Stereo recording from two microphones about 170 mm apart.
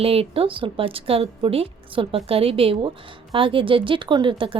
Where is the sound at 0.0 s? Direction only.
35° right (ahead or behind).